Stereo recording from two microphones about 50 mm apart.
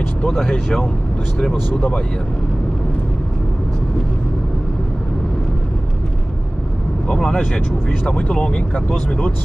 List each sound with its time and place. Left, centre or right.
0.3 s speech: centre
7.1 s speech: centre